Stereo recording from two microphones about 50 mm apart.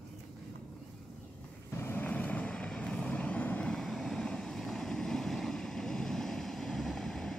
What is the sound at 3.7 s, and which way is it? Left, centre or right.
Vehicle, centre.